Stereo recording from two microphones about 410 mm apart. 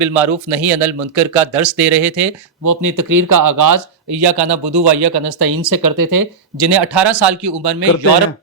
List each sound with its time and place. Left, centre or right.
0.0 s speech: centre
2.6 s speech: right
4.2 s speech: right
6.7 s speech: right